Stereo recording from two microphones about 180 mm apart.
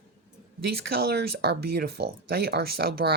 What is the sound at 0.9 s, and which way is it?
Speech, 60° right (ahead or behind).